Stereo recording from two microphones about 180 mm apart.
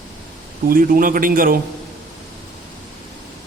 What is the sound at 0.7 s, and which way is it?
Speech, 50° right (ahead or behind).